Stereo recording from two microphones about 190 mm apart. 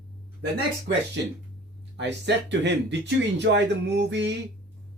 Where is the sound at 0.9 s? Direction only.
60° right (ahead or behind).